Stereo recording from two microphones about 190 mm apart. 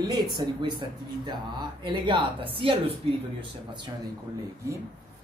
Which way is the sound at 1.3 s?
25° right (ahead or behind).